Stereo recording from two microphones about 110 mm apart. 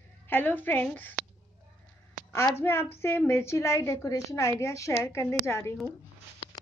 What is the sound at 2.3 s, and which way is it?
A woman's voice, 20° left (ahead or behind).